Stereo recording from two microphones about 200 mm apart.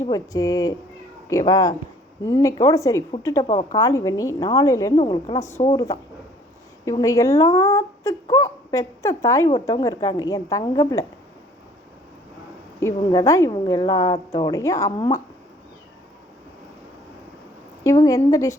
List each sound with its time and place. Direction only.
0.0 s a woman's voice: 20° left (ahead or behind)
3.8 s a woman's voice: 15° left (ahead or behind)
12.8 s a woman's voice: 15° left (ahead or behind)
17.8 s a woman's voice: 15° left (ahead or behind)